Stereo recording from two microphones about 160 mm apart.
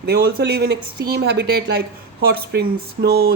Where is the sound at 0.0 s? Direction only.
80° right.